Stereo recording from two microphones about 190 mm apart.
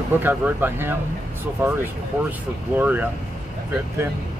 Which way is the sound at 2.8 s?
10° right (ahead or behind).